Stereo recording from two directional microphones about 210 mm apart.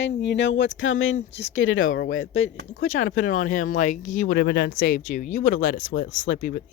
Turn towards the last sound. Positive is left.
turn(degrees=40)  # may be behind; listen again after turning